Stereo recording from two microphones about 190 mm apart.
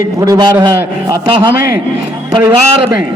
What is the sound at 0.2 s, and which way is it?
A man's voice, 15° right (ahead or behind).